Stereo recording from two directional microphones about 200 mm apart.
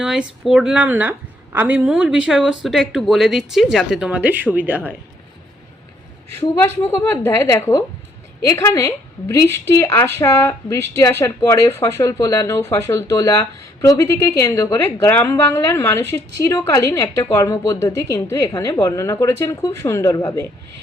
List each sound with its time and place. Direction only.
0.0 s speech: 5° right (ahead or behind)
6.3 s a woman's voice: 10° left (ahead or behind)